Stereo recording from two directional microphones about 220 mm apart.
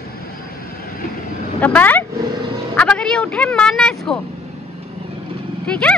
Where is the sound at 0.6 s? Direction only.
40° left (ahead or behind).